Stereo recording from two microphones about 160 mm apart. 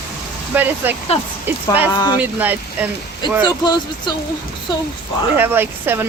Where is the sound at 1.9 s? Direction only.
25° left (ahead or behind).